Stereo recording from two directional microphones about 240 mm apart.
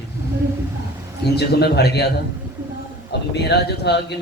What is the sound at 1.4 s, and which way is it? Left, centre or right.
A man's voice, left.